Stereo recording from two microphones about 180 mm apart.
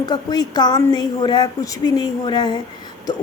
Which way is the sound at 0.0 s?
20° left (ahead or behind).